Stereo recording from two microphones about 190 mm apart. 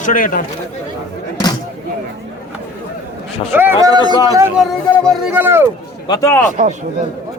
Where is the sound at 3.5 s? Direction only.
15° right (ahead or behind).